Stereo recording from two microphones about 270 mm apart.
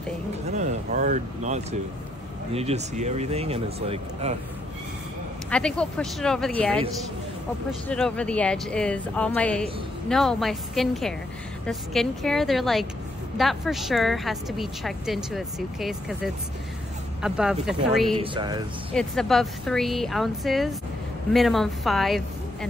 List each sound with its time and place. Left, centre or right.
0.5 s speech: right
5.5 s speech: centre
7.9 s speech: centre
17.2 s speech: centre
18.2 s speech: centre
18.9 s speech: centre